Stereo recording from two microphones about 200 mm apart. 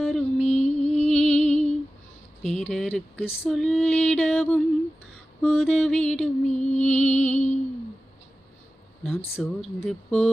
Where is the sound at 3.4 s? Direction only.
Centre (ahead or behind).